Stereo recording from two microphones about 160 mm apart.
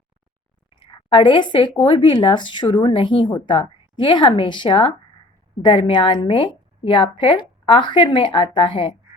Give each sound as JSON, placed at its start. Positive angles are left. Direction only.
{"t": 0.8, "sound": "a woman's voice", "side_deg": 30}